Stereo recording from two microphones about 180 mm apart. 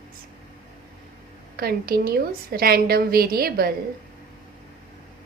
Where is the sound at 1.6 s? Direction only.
60° right (ahead or behind).